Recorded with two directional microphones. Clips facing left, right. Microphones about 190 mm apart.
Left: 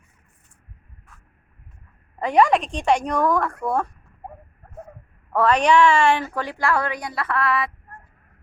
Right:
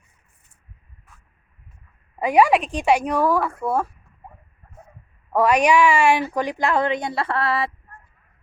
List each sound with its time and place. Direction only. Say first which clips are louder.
1.1 s a sound: even; centre (ahead or behind)
2.1 s a woman's voice: right 1 dB; 10° right (ahead or behind)
5.3 s a woman's voice: right 1 dB; 10° right (ahead or behind); by 7.7 s 30° right (ahead or behind)